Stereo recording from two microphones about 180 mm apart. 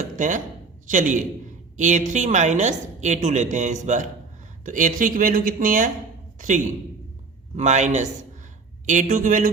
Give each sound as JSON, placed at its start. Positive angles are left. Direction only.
{"t": 0.0, "sound": "a woman's voice", "side_deg": -45}
{"t": 7.5, "sound": "a man's voice", "side_deg": -40}